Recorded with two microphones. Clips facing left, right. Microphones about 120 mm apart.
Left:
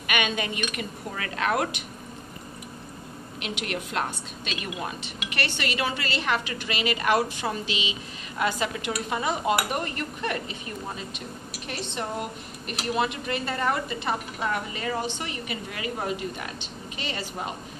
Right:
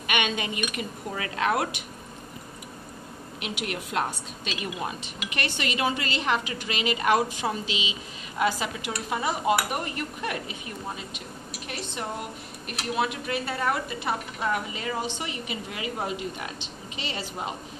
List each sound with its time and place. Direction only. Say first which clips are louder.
0.0 s a woman's voice: even; 20° right (ahead or behind)
3.4 s a woman's voice: left 1 dB; 10° right (ahead or behind)
5.3 s a woman's voice: even; 15° right (ahead or behind)
12.6 s a woman's voice: left 1 dB; centre (ahead or behind); by 17.2 s 20° right (ahead or behind)